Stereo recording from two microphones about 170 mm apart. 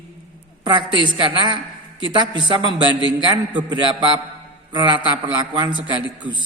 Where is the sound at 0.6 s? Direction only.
25° right (ahead or behind).